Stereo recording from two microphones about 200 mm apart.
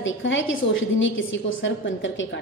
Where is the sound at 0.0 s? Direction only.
70° left (ahead or behind).